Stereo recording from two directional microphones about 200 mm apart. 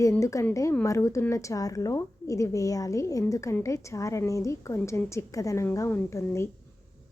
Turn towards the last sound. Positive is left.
turn(degrees=15)  # may be behind; listen again after turning